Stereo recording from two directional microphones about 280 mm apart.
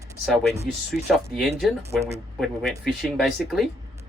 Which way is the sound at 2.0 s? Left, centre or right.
Right.